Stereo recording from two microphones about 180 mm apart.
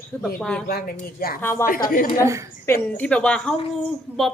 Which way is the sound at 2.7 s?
10° left (ahead or behind).